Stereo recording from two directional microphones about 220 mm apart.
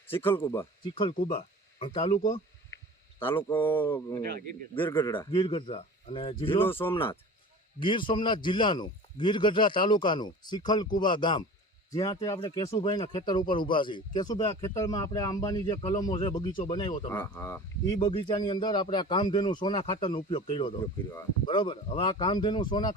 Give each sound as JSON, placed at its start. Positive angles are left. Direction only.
{"t": 0.1, "sound": "speech", "side_deg": 10}
{"t": 3.2, "sound": "speech", "side_deg": 10}
{"t": 4.2, "sound": "a man's voice", "side_deg": -45}
{"t": 4.9, "sound": "a man's voice", "side_deg": 20}
{"t": 6.6, "sound": "speech", "side_deg": 10}
{"t": 7.8, "sound": "a man's voice", "side_deg": 20}